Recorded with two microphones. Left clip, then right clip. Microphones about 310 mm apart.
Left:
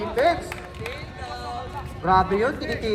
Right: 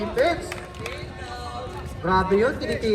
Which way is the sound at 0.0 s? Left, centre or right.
Left.